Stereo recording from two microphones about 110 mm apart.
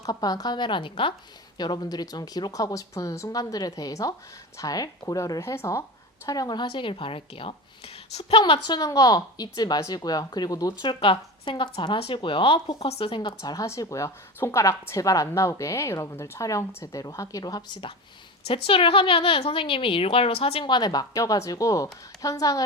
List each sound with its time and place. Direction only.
0.0 s a woman's voice: 35° left (ahead or behind)
1.5 s a woman's voice: 40° left (ahead or behind); by 8.5 s 60° left (ahead or behind)
8.5 s a woman's voice: 35° left (ahead or behind)
13.4 s speech: 30° left (ahead or behind)
18.4 s a woman's voice: 55° left (ahead or behind); by 22.6 s 30° left (ahead or behind)